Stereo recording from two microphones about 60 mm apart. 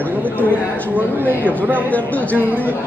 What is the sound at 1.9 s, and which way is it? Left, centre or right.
Speech, left.